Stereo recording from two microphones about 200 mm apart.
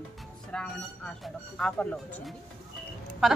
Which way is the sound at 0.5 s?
5° left (ahead or behind).